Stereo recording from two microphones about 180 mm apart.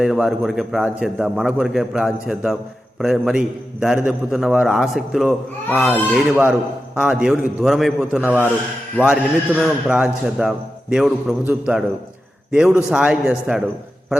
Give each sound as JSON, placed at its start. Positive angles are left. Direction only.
{"t": 0.0, "sound": "a man's voice", "side_deg": 0}
{"t": 9.6, "sound": "a man's voice", "side_deg": -5}